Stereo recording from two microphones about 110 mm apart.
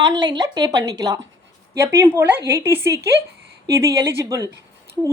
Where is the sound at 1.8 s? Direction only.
20° right (ahead or behind).